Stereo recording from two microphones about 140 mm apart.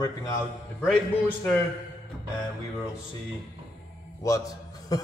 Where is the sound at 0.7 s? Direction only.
10° left (ahead or behind).